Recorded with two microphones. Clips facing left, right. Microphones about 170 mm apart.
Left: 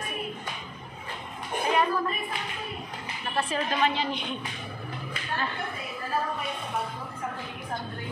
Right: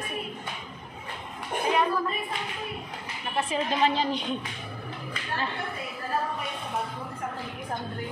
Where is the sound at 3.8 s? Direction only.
35° right (ahead or behind).